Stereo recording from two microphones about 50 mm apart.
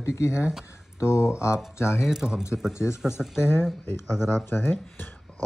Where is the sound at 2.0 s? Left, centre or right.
Centre.